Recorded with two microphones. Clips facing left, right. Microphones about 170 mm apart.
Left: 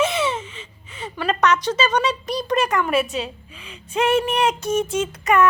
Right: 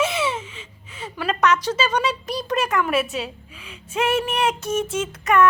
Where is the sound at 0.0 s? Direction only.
5° right (ahead or behind).